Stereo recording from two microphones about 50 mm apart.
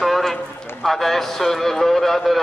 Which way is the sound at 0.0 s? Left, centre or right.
Centre.